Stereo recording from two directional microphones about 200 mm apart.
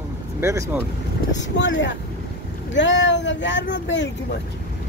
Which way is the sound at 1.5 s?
60° left (ahead or behind).